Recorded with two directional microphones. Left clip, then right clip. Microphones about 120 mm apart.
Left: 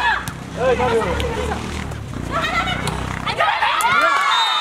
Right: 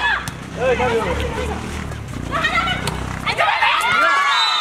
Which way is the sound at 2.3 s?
15° left (ahead or behind).